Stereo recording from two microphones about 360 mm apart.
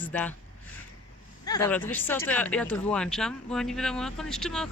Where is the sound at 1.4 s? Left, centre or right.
Centre.